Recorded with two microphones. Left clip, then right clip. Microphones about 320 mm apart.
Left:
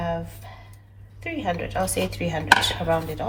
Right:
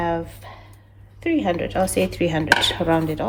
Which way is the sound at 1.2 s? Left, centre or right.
Right.